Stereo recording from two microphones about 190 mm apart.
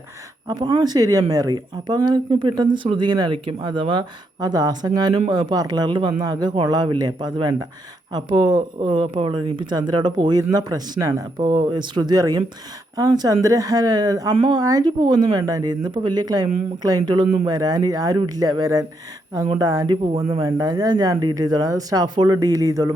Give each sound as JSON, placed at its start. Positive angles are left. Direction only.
{"t": 0.4, "sound": "speech", "side_deg": -20}